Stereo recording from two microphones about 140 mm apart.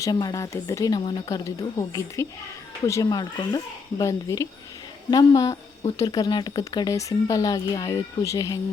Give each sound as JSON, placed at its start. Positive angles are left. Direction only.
{"t": 0.0, "sound": "speech", "side_deg": 25}
{"t": 1.5, "sound": "speech", "side_deg": 25}